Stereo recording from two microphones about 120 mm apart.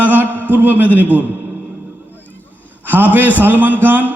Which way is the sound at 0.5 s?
15° right (ahead or behind).